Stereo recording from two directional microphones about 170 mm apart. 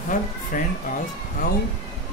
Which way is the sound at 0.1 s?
50° left (ahead or behind).